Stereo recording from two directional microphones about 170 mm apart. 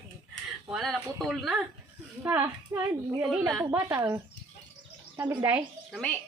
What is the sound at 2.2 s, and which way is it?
A woman's voice, 10° right (ahead or behind).